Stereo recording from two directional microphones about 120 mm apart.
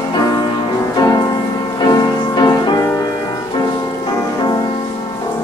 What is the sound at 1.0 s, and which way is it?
Music, 30° left (ahead or behind).